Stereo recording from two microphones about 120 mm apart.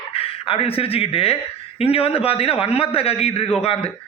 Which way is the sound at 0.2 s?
50° left (ahead or behind).